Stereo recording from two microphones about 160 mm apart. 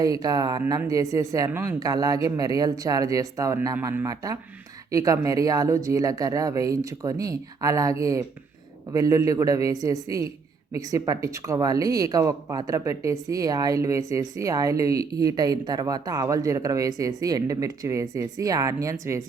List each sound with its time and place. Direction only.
0.0 s speech: 25° right (ahead or behind)
10.8 s speech: 20° right (ahead or behind)